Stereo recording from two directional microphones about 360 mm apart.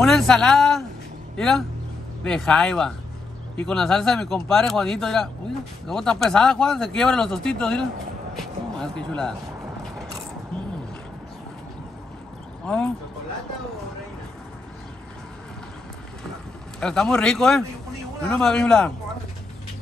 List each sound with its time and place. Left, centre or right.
0.0 s a man's voice: centre
12.6 s speech: centre
16.8 s speech: centre